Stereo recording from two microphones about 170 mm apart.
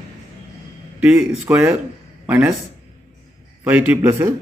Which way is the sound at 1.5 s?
10° right (ahead or behind).